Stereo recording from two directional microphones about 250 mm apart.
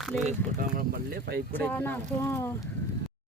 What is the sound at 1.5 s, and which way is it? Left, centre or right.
Speech, centre.